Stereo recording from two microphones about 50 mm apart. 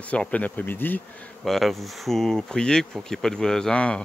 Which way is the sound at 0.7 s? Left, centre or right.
Left.